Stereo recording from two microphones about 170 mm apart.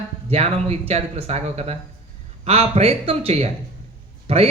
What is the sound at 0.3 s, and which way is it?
Speech, 35° right (ahead or behind).